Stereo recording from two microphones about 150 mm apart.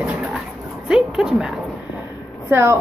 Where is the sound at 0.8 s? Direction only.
5° right (ahead or behind).